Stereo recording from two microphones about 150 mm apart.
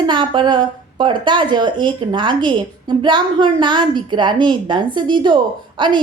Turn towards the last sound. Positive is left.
turn(degrees=-30)  # may be behind; listen again after turning